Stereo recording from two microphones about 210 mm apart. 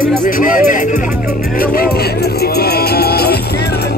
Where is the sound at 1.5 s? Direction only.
45° left (ahead or behind).